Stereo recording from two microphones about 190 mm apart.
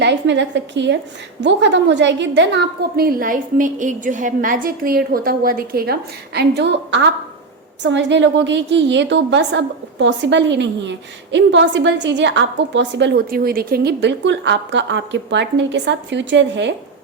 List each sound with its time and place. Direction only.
0.0 s a woman's voice: 65° right (ahead or behind)